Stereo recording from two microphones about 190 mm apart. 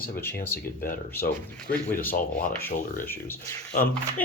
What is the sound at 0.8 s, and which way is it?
Speech, 50° left (ahead or behind).